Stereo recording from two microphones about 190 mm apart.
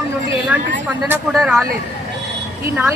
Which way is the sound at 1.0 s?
5° right (ahead or behind).